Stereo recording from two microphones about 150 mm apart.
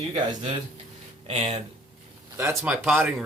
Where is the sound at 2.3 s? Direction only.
10° right (ahead or behind).